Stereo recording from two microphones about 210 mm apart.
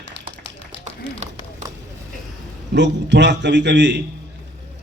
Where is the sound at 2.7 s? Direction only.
55° right (ahead or behind).